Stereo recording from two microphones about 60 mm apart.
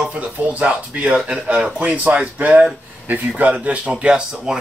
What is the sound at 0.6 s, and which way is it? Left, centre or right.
Speech, right.